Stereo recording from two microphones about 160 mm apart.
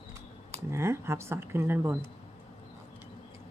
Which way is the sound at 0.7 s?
15° right (ahead or behind).